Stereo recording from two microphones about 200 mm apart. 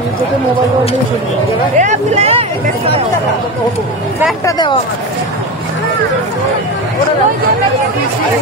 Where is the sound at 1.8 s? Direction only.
35° right (ahead or behind).